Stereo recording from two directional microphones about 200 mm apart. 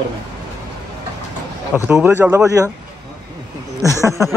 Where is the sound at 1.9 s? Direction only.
10° right (ahead or behind).